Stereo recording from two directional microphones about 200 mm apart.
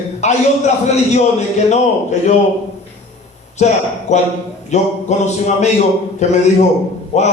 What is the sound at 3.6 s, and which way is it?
A man's voice, 35° left (ahead or behind).